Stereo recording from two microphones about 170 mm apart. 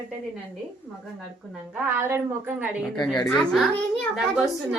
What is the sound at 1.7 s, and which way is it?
A woman's voice, 10° right (ahead or behind).